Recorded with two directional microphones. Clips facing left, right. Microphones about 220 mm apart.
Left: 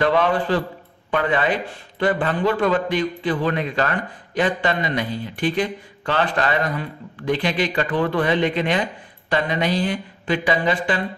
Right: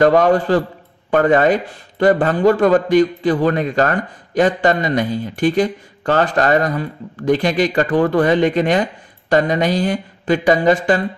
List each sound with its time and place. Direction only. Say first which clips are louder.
0.0 s a man's voice: right 6 dB; 45° right (ahead or behind)